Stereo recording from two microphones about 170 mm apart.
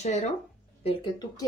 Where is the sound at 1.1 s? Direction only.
20° left (ahead or behind).